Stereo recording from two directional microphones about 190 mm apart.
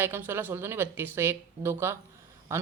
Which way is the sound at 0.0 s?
10° right (ahead or behind).